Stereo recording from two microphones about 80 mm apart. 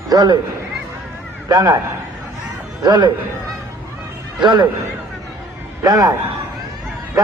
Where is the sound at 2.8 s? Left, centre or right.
Right.